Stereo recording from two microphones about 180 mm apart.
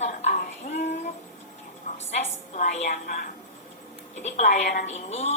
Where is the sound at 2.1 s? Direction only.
40° left (ahead or behind).